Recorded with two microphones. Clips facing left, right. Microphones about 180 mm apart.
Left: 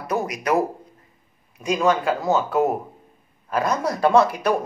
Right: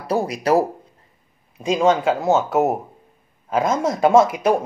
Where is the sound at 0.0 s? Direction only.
30° right (ahead or behind).